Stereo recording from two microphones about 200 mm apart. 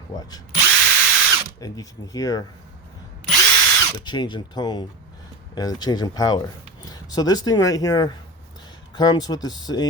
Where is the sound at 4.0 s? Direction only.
20° left (ahead or behind).